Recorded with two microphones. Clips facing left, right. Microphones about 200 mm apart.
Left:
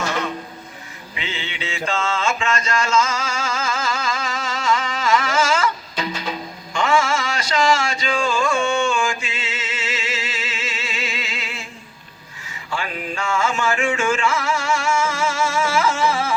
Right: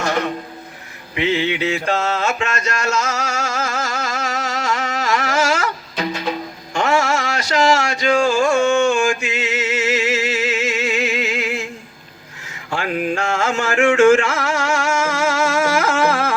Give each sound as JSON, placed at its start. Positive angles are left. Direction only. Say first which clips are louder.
{"t": 1.1, "sound": "mantra", "louder": "right 13 dB", "side_deg": -65}
{"t": 4.7, "sound": "a sound", "louder": "left 3 dB", "side_deg": -70}
{"t": 6.7, "sound": "music", "louder": "right 2 dB", "side_deg": -40}
{"t": 7.4, "sound": "speech", "louder": "right 3 dB", "side_deg": -40}
{"t": 7.8, "sound": "mantra", "louder": "right 6 dB", "side_deg": -70}
{"t": 12.7, "sound": "a sound", "louder": "right 6 dB", "side_deg": -65}